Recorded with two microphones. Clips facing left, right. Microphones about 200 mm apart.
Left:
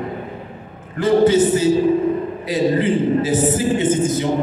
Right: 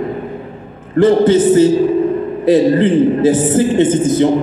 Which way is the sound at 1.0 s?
55° right (ahead or behind).